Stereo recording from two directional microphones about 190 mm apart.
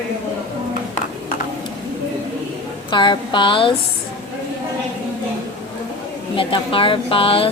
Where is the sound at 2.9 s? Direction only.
25° left (ahead or behind).